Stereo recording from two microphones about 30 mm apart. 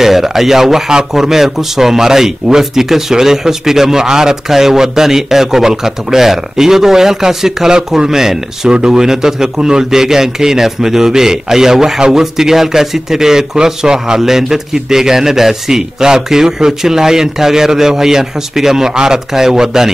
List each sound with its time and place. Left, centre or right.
0.0 s a man's voice: centre
8.6 s a man's voice: right